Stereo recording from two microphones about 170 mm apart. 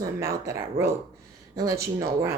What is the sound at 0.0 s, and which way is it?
Speech, 20° right (ahead or behind).